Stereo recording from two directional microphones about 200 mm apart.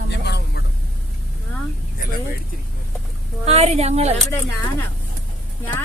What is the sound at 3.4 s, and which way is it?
Speech, 30° right (ahead or behind).